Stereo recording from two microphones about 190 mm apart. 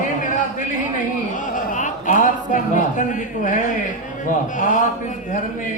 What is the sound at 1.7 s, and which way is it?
Speech, 40° left (ahead or behind).